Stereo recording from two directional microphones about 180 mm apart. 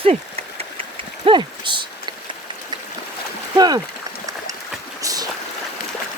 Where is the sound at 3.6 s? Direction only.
20° right (ahead or behind).